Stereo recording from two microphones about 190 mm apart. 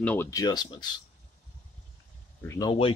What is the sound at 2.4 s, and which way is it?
Speech, 20° left (ahead or behind).